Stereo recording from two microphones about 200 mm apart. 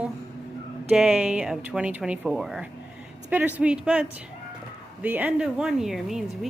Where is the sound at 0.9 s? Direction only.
5° right (ahead or behind).